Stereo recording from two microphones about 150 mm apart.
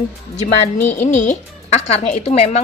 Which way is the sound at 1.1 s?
55° left (ahead or behind).